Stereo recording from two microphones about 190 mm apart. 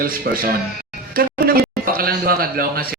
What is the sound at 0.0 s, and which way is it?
A man's voice, 50° right (ahead or behind).